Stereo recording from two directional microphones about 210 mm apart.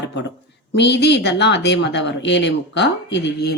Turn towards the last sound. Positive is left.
turn(degrees=55)  # may be behind; listen again after turning